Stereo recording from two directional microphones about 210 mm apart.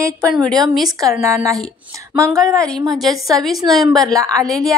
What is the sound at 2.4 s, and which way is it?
Speech, 5° left (ahead or behind).